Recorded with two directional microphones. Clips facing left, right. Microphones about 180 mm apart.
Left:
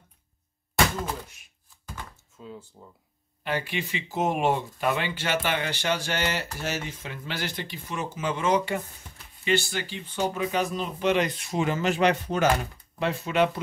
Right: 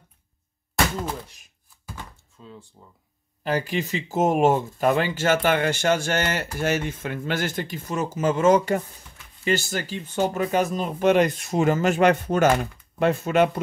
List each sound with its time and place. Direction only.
2.3 s speech: 10° left (ahead or behind)
3.4 s speech: 40° right (ahead or behind)